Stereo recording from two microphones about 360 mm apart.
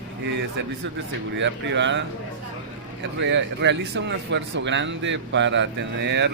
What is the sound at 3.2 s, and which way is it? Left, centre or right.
Speech, right.